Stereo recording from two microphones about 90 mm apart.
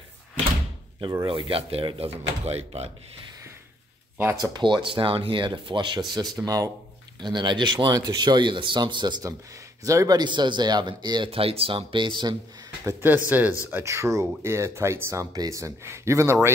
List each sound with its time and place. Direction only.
1.2 s speech: 80° right
4.4 s speech: 55° right (ahead or behind)
7.2 s speech: 55° right (ahead or behind)
9.8 s speech: 35° right (ahead or behind)
10.1 s speech: 55° right (ahead or behind)
11.2 s speech: 90° right; by 12.4 s 60° right (ahead or behind)
13.0 s speech: 20° right (ahead or behind)
13.8 s speech: 35° right (ahead or behind)
15.3 s speech: 40° right (ahead or behind)